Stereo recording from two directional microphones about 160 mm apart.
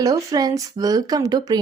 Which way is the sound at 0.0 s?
25° right (ahead or behind).